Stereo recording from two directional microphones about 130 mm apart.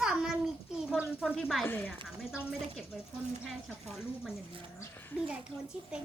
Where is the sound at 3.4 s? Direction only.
Centre (ahead or behind).